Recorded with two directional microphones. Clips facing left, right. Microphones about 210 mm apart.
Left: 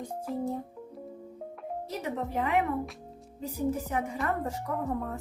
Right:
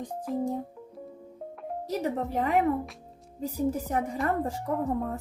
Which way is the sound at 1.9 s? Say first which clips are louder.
Right 5 dB; 35° right (ahead or behind).